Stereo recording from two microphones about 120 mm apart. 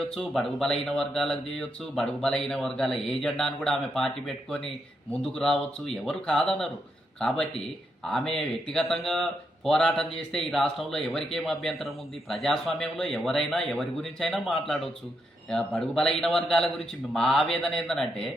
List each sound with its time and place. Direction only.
0.1 s a man's voice: 5° left (ahead or behind)